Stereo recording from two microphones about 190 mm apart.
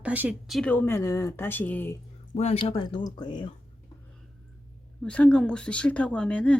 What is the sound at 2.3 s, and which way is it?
Speech, 35° left (ahead or behind).